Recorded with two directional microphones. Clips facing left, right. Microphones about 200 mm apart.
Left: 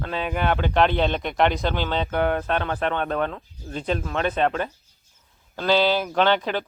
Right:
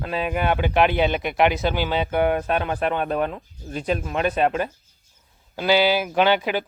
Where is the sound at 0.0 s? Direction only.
10° right (ahead or behind).